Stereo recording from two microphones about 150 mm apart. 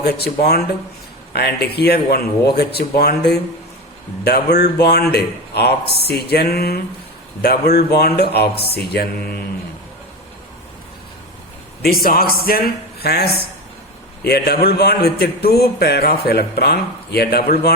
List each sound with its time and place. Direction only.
0.0 s a man's voice: 90° left
11.8 s a man's voice: 90° left